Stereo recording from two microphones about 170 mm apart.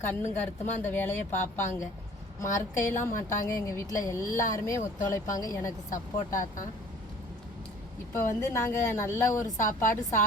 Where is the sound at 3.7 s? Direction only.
20° left (ahead or behind).